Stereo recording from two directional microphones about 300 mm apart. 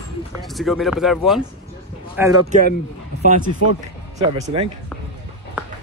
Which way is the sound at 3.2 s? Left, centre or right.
Right.